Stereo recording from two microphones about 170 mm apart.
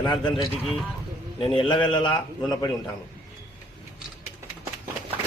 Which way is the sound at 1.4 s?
25° left (ahead or behind).